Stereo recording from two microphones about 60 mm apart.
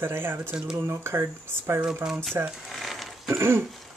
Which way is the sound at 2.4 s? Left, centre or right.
Right.